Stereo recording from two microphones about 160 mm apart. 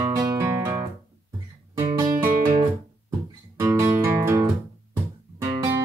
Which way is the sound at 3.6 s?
15° right (ahead or behind).